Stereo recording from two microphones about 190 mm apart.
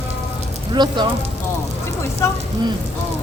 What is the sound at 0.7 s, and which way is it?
Speech, 25° right (ahead or behind).